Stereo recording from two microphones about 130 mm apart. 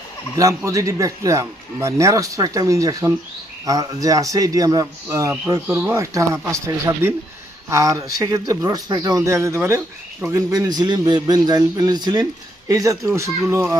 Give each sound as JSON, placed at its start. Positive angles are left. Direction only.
{"t": 0.3, "sound": "a man's voice", "side_deg": -25}